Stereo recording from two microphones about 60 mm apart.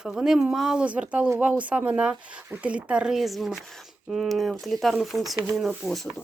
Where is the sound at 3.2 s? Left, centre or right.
Centre.